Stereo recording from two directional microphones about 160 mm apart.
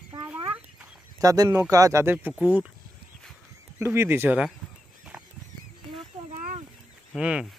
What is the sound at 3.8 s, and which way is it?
Speech, 15° right (ahead or behind).